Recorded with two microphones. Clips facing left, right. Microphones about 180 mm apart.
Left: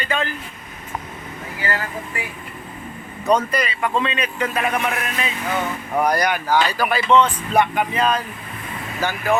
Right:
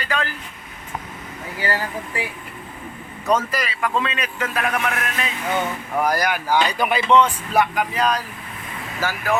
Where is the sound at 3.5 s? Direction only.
Centre (ahead or behind).